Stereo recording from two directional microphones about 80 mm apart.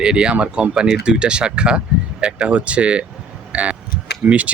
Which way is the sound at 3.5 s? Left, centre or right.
Centre.